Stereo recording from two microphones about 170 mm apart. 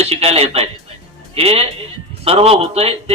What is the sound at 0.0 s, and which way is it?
A man's voice, 35° right (ahead or behind).